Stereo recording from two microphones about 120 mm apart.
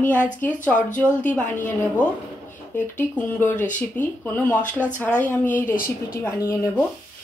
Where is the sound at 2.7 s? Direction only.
15° left (ahead or behind).